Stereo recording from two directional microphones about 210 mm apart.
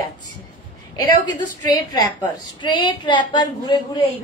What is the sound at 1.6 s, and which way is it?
A woman's voice, 20° left (ahead or behind).